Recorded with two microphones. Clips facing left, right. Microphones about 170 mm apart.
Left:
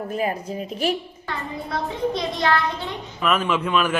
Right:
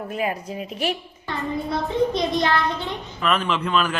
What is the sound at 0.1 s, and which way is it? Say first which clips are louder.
Speech: left 1 dB; 40° left (ahead or behind).